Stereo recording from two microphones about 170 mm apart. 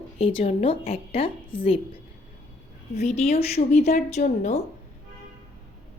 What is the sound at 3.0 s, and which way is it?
A woman's voice, 40° left (ahead or behind).